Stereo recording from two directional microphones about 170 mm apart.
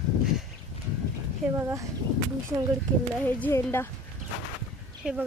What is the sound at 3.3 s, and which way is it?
Speech, 10° left (ahead or behind).